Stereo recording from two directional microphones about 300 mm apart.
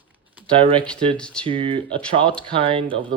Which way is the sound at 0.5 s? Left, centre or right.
Centre.